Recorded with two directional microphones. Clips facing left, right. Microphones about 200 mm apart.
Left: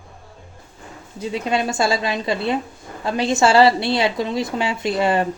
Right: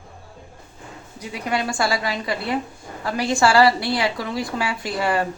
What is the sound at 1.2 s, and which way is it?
A woman's voice, 25° left (ahead or behind).